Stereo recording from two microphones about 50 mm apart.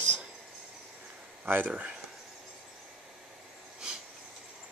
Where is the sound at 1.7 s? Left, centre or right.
Right.